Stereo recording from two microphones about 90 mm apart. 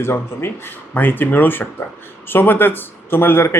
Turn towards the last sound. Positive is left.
turn(degrees=25)  # may be behind; listen again after turning